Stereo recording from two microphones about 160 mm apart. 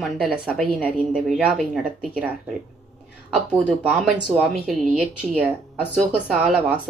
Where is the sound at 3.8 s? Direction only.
10° right (ahead or behind).